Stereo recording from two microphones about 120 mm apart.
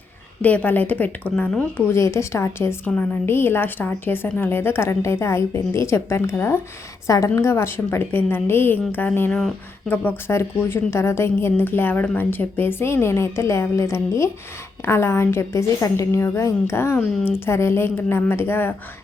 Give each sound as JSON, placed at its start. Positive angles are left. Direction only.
{"t": 0.4, "sound": "a woman's voice", "side_deg": 15}
{"t": 1.9, "sound": "a woman's voice", "side_deg": 25}